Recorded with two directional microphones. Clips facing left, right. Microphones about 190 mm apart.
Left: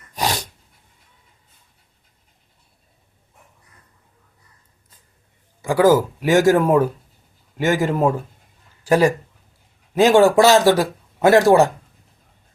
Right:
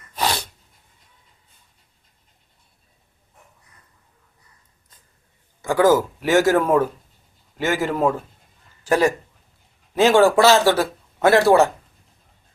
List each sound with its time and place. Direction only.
0.1 s dog: 15° left (ahead or behind)
5.6 s speech: 10° left (ahead or behind)